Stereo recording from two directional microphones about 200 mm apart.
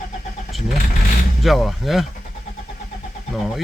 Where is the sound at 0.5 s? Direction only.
Centre (ahead or behind).